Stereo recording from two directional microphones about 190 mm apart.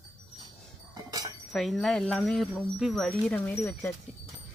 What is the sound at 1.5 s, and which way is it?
Speech, centre (ahead or behind).